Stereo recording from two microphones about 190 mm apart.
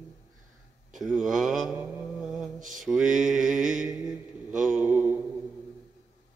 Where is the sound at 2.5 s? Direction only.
40° right (ahead or behind).